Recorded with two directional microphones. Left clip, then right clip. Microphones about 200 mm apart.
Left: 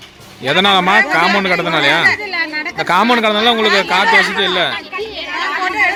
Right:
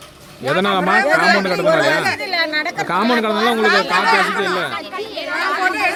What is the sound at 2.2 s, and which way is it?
Speech, 30° right (ahead or behind).